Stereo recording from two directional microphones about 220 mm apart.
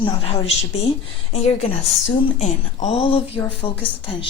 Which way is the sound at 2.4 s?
30° left (ahead or behind).